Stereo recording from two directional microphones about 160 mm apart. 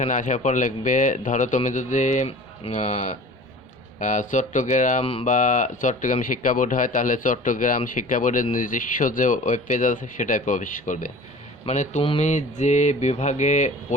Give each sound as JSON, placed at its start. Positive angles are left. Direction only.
{"t": 0.0, "sound": "a man's voice", "side_deg": 55}
{"t": 11.6, "sound": "a man's voice", "side_deg": 45}